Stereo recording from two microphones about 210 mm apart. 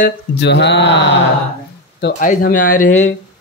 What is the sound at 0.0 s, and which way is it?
Speech, 50° left (ahead or behind).